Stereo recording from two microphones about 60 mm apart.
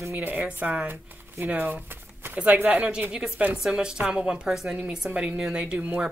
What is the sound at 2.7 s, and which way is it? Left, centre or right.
Speech, right.